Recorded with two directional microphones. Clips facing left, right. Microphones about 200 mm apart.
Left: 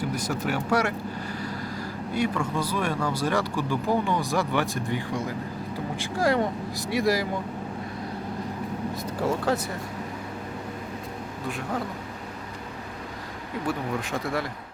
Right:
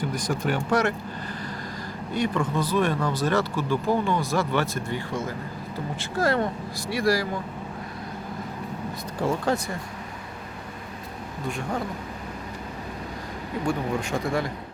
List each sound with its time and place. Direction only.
0.0 s speech: 5° left (ahead or behind)
9.5 s speech: 5° left (ahead or behind)
11.4 s speech: 5° left (ahead or behind)
13.7 s speech: centre (ahead or behind)